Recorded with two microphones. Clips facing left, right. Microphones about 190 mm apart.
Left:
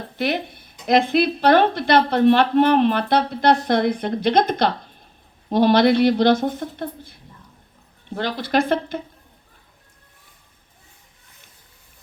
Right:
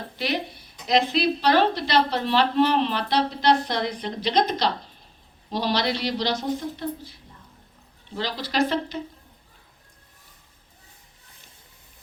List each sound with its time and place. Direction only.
0.2 s a woman's voice: 55° left (ahead or behind)